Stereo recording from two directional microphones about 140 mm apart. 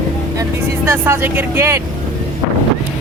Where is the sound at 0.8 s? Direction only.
20° right (ahead or behind).